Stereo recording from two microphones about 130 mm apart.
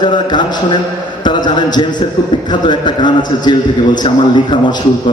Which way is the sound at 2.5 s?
35° left (ahead or behind).